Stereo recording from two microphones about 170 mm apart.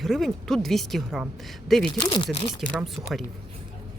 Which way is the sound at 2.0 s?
30° left (ahead or behind).